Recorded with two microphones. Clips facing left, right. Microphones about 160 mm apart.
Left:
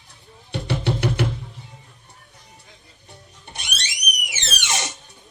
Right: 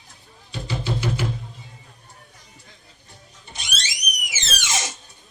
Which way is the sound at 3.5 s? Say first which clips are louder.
Right 1 dB; 60° left (ahead or behind).